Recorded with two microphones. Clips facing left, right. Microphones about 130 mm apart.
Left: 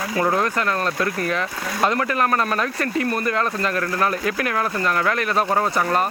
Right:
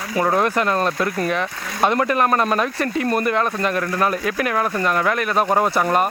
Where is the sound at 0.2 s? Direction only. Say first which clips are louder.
Right 3 dB; 15° right (ahead or behind).